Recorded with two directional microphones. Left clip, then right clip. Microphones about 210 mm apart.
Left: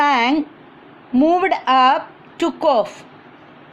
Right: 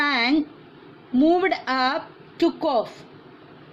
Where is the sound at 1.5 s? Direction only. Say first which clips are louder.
Left 9 dB; 10° left (ahead or behind).